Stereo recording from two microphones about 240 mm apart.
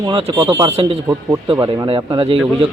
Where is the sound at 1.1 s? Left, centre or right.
Centre.